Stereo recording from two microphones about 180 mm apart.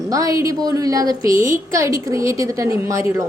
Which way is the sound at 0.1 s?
20° right (ahead or behind).